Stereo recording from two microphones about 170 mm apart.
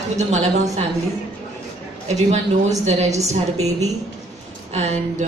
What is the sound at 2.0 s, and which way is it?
A woman's voice, 40° right (ahead or behind).